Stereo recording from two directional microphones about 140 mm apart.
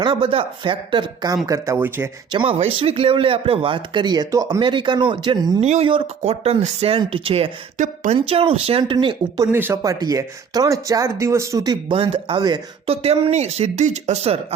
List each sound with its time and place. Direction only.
0.0 s speech: 35° right (ahead or behind)
1.5 s speech: 20° right (ahead or behind)
2.3 s speech: 35° right (ahead or behind)
5.5 s speech: 50° right (ahead or behind)
7.8 s speech: 55° right (ahead or behind); by 9.1 s 40° right (ahead or behind)
9.4 s speech: 15° right (ahead or behind)
12.8 s speech: 45° right (ahead or behind)